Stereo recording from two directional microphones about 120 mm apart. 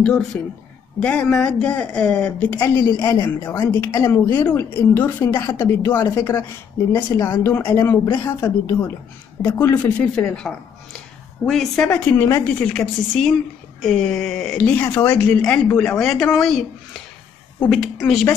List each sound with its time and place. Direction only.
0.9 s a woman's voice: 10° left (ahead or behind)
9.8 s speech: 10° left (ahead or behind)
17.6 s speech: 5° left (ahead or behind)